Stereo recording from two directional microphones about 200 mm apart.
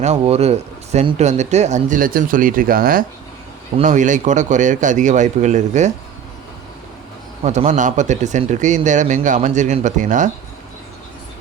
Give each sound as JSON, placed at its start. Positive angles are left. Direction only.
{"t": 0.0, "sound": "speech", "side_deg": -35}
{"t": 7.4, "sound": "speech", "side_deg": -35}